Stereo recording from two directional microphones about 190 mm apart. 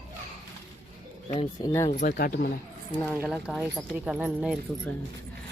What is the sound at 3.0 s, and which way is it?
Speech, 10° left (ahead or behind).